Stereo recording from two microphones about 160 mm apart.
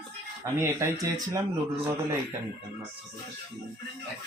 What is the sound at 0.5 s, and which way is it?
Speech, 20° right (ahead or behind).